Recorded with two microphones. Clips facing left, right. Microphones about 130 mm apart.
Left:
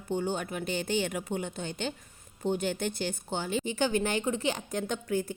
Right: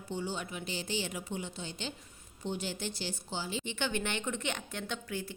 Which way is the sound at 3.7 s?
40° left (ahead or behind).